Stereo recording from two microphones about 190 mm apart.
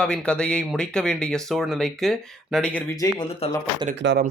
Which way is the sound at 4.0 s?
65° right (ahead or behind).